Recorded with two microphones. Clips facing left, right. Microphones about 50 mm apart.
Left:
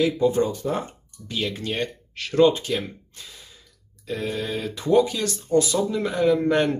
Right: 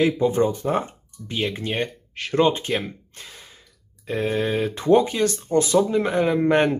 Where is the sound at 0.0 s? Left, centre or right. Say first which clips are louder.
Right 1 dB; right.